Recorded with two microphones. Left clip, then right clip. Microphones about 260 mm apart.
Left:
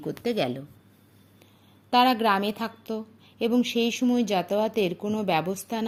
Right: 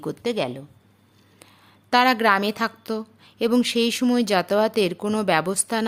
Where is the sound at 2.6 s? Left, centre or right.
Right.